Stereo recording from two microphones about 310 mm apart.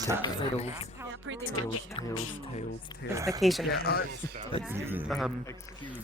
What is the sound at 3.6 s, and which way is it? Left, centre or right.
Speech, left.